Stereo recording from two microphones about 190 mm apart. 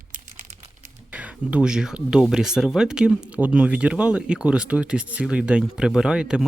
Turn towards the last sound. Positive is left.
turn(degrees=-5)  # may be behind; listen again after turning